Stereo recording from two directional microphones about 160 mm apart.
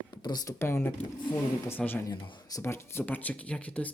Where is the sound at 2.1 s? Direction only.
25° left (ahead or behind); by 3.9 s 10° left (ahead or behind).